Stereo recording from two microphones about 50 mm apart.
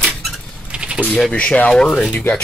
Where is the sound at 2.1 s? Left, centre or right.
Left.